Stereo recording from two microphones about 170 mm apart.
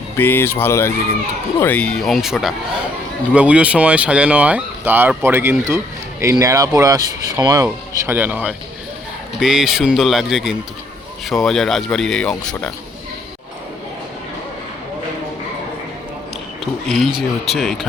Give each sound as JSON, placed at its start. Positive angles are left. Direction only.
{"t": 0.2, "sound": "speech", "side_deg": 10}
{"t": 16.9, "sound": "speech", "side_deg": 0}